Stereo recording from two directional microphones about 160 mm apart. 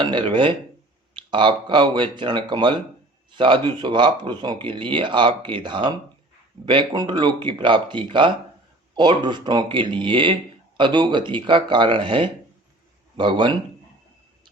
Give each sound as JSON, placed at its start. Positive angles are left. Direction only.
{"t": 0.0, "sound": "speech", "side_deg": -30}